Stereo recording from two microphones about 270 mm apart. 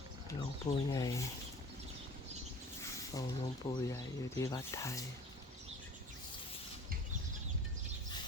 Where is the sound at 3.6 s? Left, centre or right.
Centre.